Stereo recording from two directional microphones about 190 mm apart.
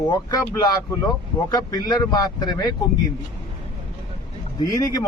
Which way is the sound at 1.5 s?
20° left (ahead or behind).